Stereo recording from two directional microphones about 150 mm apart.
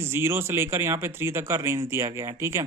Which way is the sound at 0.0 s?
15° right (ahead or behind).